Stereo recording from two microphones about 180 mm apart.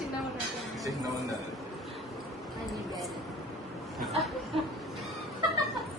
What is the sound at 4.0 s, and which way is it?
Chatter, centre (ahead or behind).